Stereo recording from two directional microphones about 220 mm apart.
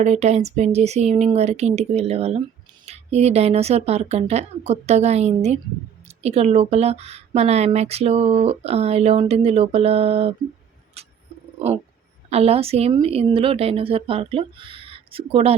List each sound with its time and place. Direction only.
0.0 s speech: 30° right (ahead or behind)
11.0 s a sound: 30° right (ahead or behind)
12.3 s speech: 25° right (ahead or behind)